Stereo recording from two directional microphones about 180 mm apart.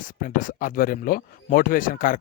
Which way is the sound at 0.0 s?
50° left (ahead or behind).